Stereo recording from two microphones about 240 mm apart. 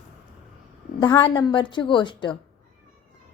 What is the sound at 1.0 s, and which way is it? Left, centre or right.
A woman's voice, centre.